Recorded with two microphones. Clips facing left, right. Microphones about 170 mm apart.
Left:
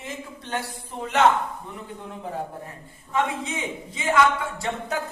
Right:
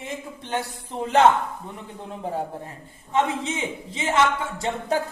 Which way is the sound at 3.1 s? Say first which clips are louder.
Right 2 dB; 25° right (ahead or behind).